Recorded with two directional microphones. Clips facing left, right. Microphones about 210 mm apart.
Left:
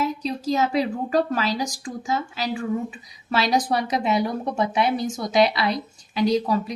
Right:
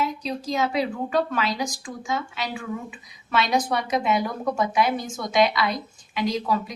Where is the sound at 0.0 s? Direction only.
40° left (ahead or behind).